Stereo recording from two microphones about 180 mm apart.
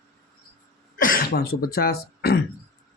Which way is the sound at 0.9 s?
50° left (ahead or behind).